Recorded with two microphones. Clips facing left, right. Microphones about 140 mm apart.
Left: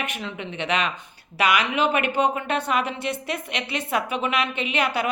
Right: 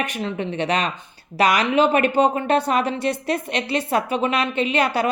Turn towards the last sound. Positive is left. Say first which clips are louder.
# right 5 dB
turn(degrees=-35)  # may be behind; listen again after turning